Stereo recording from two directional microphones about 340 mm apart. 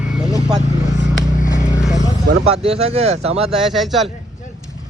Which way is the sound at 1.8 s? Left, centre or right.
Centre.